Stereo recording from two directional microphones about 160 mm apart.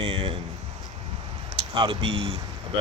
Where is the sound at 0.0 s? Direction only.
35° right (ahead or behind).